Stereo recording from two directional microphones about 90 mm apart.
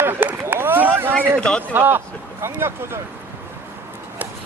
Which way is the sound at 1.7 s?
20° right (ahead or behind).